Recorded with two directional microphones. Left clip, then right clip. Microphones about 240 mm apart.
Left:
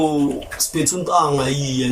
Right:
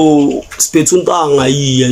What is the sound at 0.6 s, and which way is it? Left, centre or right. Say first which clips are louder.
Speech: right 13 dB; right.